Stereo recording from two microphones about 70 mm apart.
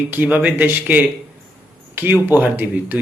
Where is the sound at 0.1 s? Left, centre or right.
Right.